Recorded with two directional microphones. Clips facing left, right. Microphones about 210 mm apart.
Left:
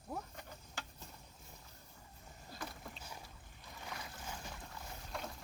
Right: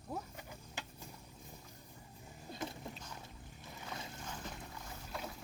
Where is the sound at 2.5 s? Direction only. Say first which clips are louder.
Right 5 dB; 20° right (ahead or behind).